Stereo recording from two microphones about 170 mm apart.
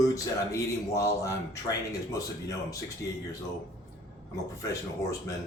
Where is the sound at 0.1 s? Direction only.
20° left (ahead or behind).